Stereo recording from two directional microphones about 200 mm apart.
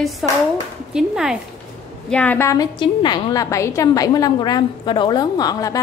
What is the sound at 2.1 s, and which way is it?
A woman's voice, 10° left (ahead or behind).